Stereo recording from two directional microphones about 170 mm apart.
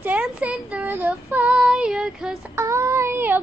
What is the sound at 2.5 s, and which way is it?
Child singing, 15° right (ahead or behind).